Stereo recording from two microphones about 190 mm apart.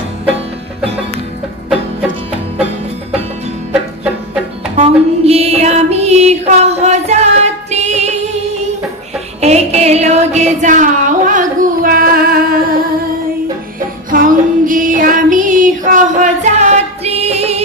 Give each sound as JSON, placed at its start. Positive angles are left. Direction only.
{"t": 4.8, "sound": "music", "side_deg": -30}
{"t": 9.4, "sound": "a sound", "side_deg": -35}
{"t": 13.7, "sound": "music", "side_deg": -45}